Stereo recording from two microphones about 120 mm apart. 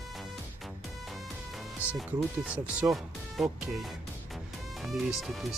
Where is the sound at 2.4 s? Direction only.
10° right (ahead or behind).